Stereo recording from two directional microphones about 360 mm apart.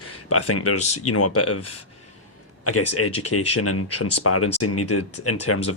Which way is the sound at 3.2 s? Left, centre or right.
Left.